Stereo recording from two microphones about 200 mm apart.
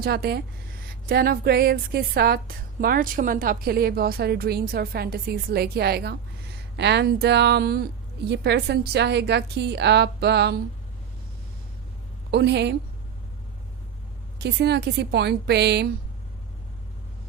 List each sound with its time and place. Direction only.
0.0 s a woman's voice: 50° right (ahead or behind)
12.3 s a woman's voice: 60° right (ahead or behind)
14.3 s a woman's voice: 55° right (ahead or behind)